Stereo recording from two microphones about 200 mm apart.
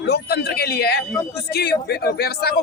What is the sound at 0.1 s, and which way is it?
A man's voice, 50° left (ahead or behind).